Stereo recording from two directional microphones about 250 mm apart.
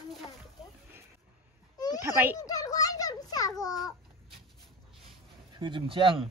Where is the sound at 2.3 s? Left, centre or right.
Centre.